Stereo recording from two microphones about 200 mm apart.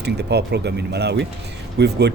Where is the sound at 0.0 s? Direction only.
55° right (ahead or behind).